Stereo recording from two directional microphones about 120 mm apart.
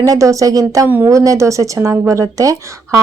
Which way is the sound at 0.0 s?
30° right (ahead or behind).